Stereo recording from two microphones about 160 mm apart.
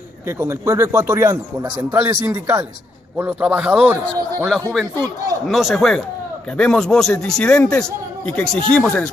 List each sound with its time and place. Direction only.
0.4 s speech: 15° right (ahead or behind)
5.0 s speech: 20° right (ahead or behind)
5.5 s a man's voice: centre (ahead or behind)